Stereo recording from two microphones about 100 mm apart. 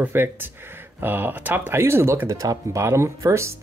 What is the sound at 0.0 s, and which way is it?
Speech, 20° right (ahead or behind).